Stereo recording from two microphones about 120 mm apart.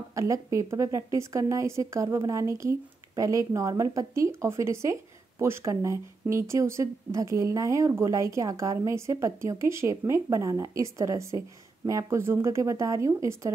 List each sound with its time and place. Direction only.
0.1 s speech: 25° right (ahead or behind)